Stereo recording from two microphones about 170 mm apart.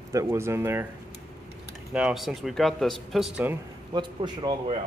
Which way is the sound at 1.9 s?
5° right (ahead or behind).